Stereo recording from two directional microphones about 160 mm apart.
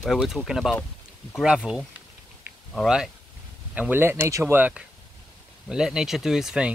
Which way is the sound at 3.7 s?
10° right (ahead or behind).